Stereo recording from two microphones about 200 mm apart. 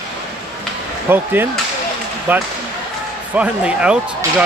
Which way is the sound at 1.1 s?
10° right (ahead or behind).